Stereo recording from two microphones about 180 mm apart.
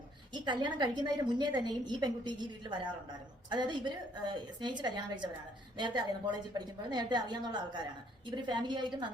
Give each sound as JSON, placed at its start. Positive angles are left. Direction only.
{"t": 0.4, "sound": "a woman's voice", "side_deg": -25}